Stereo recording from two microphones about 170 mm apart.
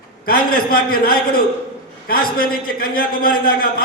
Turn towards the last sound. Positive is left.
turn(degrees=60)  # may be behind; listen again after turning